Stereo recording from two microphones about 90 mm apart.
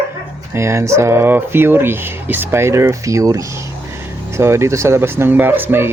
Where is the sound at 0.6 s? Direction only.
30° right (ahead or behind).